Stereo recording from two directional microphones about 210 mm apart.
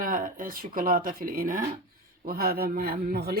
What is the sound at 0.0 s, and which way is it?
Speech, 40° right (ahead or behind).